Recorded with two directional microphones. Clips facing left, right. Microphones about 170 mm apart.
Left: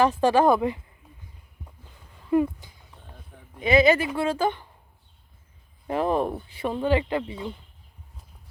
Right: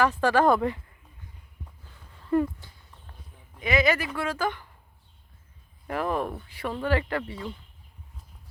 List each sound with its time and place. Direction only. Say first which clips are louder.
0.0 s speech: left 2 dB; 20° left (ahead or behind)
2.1 s a sound: left 2 dB; 15° left (ahead or behind)
3.6 s speech: left 5 dB; 25° left (ahead or behind)
5.9 s speech: left 4 dB; 25° left (ahead or behind)